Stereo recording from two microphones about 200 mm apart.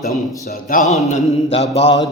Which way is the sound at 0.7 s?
45° left (ahead or behind).